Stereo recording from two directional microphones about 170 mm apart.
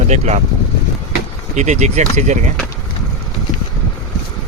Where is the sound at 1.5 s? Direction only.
45° right (ahead or behind).